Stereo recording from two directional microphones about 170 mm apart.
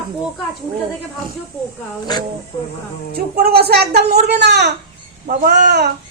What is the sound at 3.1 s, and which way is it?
Speech, 65° right (ahead or behind).